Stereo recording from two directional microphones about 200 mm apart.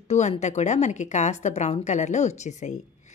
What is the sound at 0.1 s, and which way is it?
A woman's voice, 35° left (ahead or behind).